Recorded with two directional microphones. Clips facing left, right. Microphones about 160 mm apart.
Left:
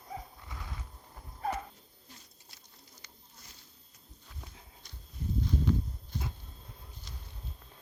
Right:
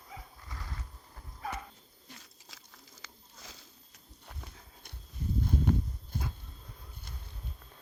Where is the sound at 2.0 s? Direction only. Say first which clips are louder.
Right 5 dB; 80° right.